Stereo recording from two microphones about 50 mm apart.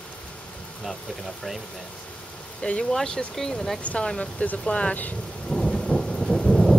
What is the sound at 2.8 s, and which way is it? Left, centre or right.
Speech, centre.